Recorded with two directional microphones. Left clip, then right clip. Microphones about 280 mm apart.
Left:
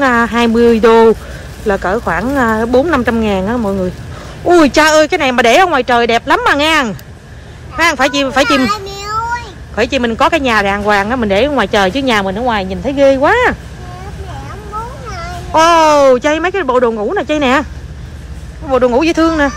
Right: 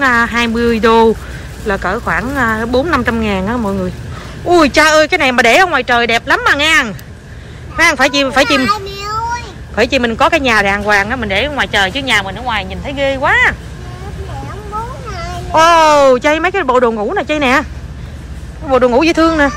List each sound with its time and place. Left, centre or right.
0.0 s a child's voice: centre
8.6 s a child's voice: centre
15.0 s a sound: centre
15.5 s a child's voice: centre
18.7 s a child's voice: centre